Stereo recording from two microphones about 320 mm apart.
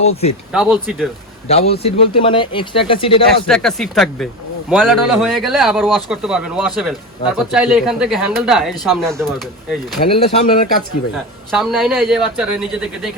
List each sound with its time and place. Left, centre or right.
0.0 s speech: centre
0.5 s speech: centre
1.5 s speech: centre
3.4 s speech: centre
10.1 s speech: centre
11.5 s speech: centre